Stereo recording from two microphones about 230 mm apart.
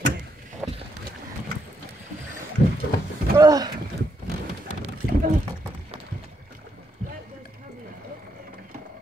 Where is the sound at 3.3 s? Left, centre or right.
Centre.